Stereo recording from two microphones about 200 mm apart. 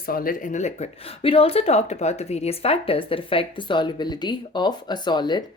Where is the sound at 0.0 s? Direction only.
45° left (ahead or behind).